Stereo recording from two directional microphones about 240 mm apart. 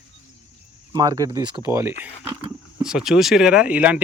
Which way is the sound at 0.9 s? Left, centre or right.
Centre.